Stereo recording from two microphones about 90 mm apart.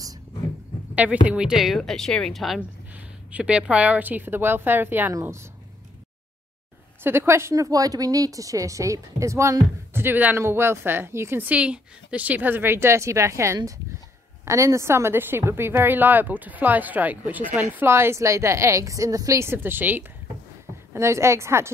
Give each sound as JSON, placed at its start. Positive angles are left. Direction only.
{"t": 1.2, "sound": "speech", "side_deg": -10}
{"t": 2.9, "sound": "a woman's voice", "side_deg": -15}
{"t": 7.0, "sound": "a woman's voice", "side_deg": -25}
{"t": 17.6, "sound": "speech", "side_deg": -30}